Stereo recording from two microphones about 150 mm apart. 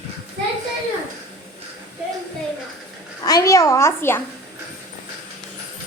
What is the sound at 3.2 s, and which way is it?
A child's voice, 25° left (ahead or behind).